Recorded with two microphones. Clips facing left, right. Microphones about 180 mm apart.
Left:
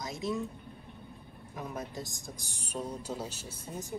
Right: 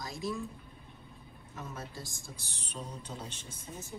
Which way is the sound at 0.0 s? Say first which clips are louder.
Left 3 dB; 20° left (ahead or behind).